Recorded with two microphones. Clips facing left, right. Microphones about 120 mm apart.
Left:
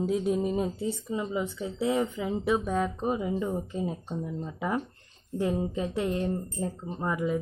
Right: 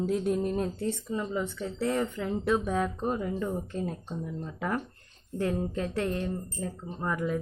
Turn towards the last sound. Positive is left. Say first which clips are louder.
# left 2 dB
turn(degrees=5)  # may be behind; listen again after turning